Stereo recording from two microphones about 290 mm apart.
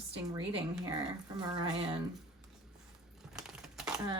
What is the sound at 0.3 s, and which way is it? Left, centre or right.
Speech, centre.